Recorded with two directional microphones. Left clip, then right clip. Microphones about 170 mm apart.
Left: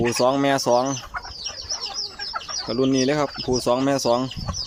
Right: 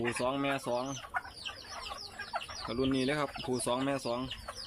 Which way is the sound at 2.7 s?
15° left (ahead or behind).